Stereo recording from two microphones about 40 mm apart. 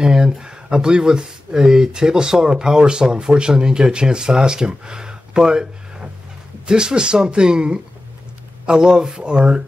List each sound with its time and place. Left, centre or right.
0.0 s speech: centre